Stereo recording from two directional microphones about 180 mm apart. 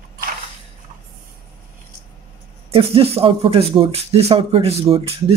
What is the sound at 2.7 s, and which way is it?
Speech, 30° right (ahead or behind).